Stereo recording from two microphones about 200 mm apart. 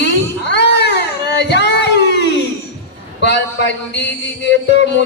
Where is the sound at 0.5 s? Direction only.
60° left (ahead or behind).